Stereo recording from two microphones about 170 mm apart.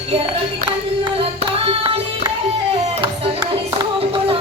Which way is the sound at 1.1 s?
35° right (ahead or behind).